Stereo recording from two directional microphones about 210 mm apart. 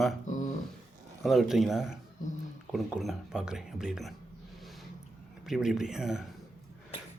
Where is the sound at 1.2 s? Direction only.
Centre (ahead or behind).